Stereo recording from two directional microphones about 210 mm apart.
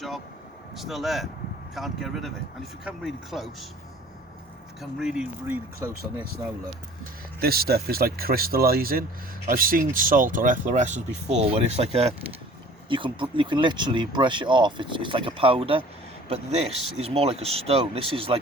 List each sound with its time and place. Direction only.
0.8 s speech: centre (ahead or behind)
4.8 s speech: centre (ahead or behind)
7.3 s speech: 45° right (ahead or behind); by 15.8 s 25° right (ahead or behind)
17.0 s speech: 30° right (ahead or behind)